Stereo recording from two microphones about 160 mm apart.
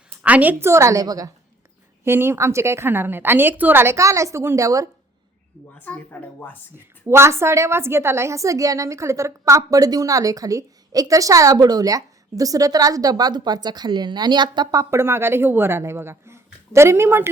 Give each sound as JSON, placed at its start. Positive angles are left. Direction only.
{"t": 0.2, "sound": "a woman's voice", "side_deg": -10}
{"t": 5.8, "sound": "a woman's voice", "side_deg": 10}
{"t": 7.1, "sound": "a woman's voice", "side_deg": -15}